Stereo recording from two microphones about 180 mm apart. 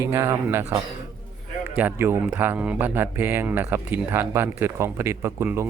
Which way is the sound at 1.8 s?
10° right (ahead or behind).